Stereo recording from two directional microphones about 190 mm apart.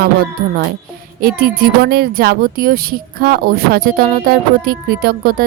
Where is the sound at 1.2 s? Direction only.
50° right (ahead or behind).